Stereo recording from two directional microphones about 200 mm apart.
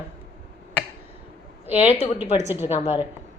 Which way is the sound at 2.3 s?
10° right (ahead or behind).